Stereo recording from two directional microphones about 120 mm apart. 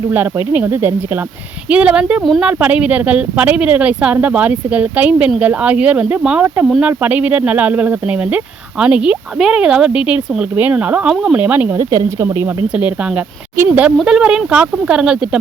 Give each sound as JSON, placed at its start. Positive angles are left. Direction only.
{"t": 0.1, "sound": "speech", "side_deg": -15}
{"t": 12.6, "sound": "speech", "side_deg": -10}